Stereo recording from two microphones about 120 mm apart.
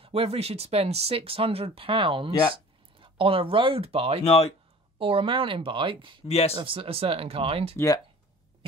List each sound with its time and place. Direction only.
0.0 s speech: 55° right (ahead or behind)
4.2 s speech: 60° left (ahead or behind)
4.9 s speech: 50° right (ahead or behind)
6.2 s speech: 60° left (ahead or behind)
6.5 s speech: 45° right (ahead or behind)
7.7 s speech: 30° left (ahead or behind)